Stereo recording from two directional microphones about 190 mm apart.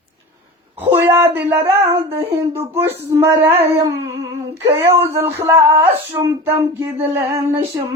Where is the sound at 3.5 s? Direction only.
30° right (ahead or behind).